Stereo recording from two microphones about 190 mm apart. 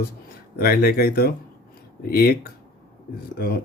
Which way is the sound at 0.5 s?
55° left (ahead or behind).